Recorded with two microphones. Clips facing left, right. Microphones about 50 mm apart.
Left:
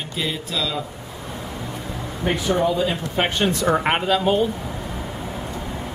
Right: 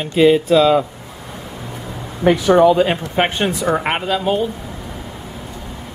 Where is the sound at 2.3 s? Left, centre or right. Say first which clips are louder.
Right 9 dB; right.